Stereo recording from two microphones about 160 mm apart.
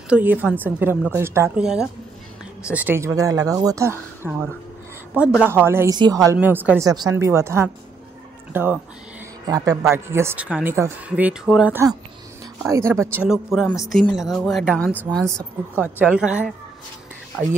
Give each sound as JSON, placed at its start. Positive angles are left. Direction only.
{"t": 0.1, "sound": "speech", "side_deg": -10}
{"t": 1.6, "sound": "speech", "side_deg": -5}
{"t": 5.4, "sound": "speech", "side_deg": -15}
{"t": 6.4, "sound": "speech", "side_deg": -10}
{"t": 6.9, "sound": "speech", "side_deg": -25}
{"t": 11.7, "sound": "speech", "side_deg": -20}
{"t": 13.3, "sound": "speech", "side_deg": 0}
{"t": 15.1, "sound": "speech", "side_deg": -15}